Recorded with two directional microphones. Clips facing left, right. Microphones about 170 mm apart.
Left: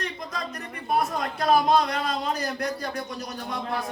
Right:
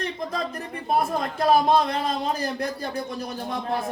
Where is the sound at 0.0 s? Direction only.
30° right (ahead or behind).